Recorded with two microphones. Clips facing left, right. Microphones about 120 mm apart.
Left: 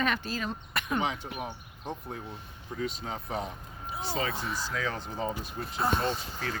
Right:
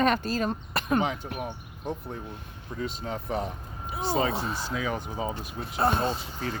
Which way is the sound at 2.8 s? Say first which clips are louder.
Right 2 dB; 50° right (ahead or behind).